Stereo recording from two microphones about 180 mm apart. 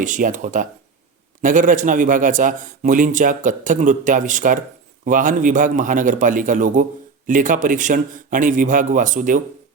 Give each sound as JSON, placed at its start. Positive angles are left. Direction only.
{"t": 0.0, "sound": "a man's voice", "side_deg": -45}